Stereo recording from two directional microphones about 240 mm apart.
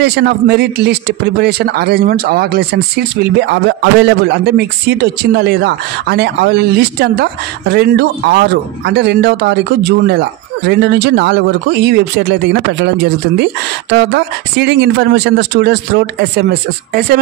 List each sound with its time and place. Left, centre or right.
0.0 s a man's voice: right